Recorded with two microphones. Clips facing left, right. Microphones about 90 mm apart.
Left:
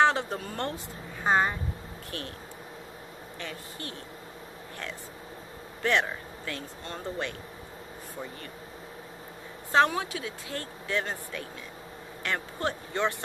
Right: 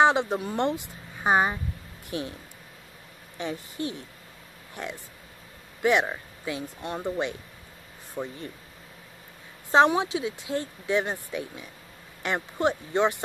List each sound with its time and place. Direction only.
0.0 s speech: 15° right (ahead or behind)
3.3 s speech: 20° right (ahead or behind)
9.7 s speech: 20° right (ahead or behind)